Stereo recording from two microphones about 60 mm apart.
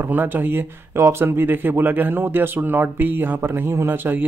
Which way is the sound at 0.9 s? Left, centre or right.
Right.